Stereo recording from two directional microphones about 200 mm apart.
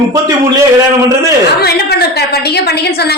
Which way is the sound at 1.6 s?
55° left (ahead or behind).